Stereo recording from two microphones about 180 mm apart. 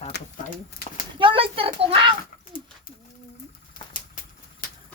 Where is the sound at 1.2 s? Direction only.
30° right (ahead or behind).